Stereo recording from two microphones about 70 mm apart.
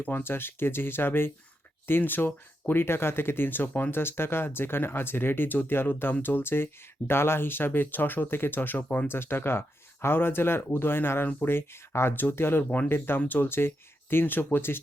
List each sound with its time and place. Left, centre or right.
0.0 s speech: left